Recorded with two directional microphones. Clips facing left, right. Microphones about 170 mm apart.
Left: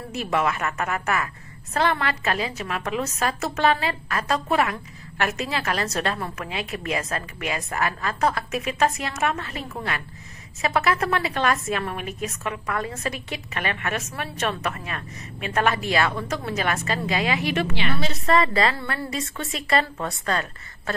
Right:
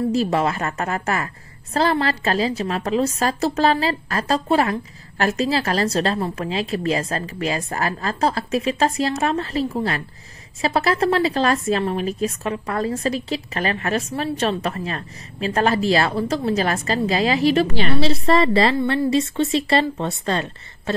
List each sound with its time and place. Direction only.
0.1 s a woman's voice: 30° right (ahead or behind)